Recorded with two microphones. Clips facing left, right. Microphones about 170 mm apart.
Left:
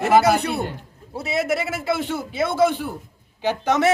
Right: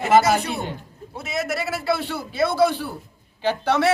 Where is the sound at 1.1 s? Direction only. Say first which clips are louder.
Left 4 dB; 30° left (ahead or behind); by 3.8 s 15° left (ahead or behind).